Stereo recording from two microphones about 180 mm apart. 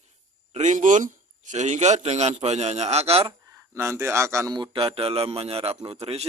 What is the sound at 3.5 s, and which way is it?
A man's voice, 15° right (ahead or behind).